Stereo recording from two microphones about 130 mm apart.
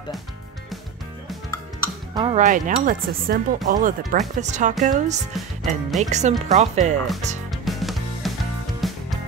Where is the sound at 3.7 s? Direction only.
85° right.